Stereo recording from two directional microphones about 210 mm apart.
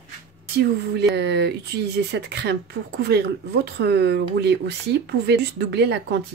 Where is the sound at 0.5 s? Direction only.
50° right (ahead or behind).